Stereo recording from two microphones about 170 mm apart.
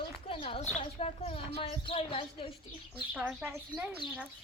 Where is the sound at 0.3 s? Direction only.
30° left (ahead or behind).